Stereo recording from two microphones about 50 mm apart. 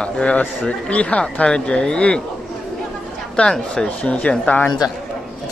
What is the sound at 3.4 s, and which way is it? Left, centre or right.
Speech, centre.